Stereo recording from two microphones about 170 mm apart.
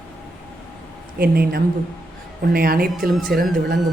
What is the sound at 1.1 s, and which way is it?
Speech, 65° right (ahead or behind).